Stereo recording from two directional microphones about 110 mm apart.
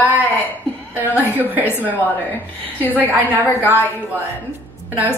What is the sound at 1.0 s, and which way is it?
Speech, 15° left (ahead or behind).